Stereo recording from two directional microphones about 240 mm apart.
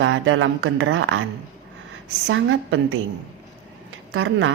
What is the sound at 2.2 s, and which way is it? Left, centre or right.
Speech, right.